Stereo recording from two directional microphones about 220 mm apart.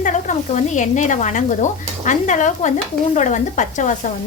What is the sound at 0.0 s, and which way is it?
Speech, 35° left (ahead or behind).